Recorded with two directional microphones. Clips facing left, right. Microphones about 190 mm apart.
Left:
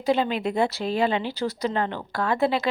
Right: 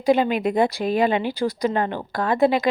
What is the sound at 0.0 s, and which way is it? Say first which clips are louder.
Speech: right 4 dB; 15° right (ahead or behind).